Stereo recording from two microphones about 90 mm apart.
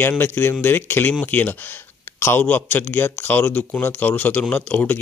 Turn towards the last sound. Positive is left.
turn(degrees=15)  # may be behind; listen again after turning